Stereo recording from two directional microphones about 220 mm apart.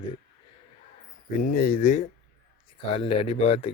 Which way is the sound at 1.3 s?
40° left (ahead or behind).